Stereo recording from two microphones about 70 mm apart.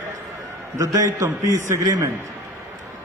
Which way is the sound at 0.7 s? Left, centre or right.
Right.